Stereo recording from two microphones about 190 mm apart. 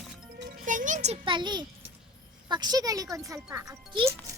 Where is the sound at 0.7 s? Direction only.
45° right (ahead or behind); by 3.7 s 15° right (ahead or behind).